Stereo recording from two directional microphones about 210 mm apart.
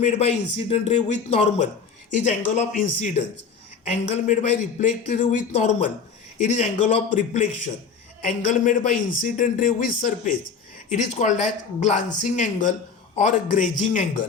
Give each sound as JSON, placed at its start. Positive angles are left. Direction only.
{"t": 0.0, "sound": "speech", "side_deg": 30}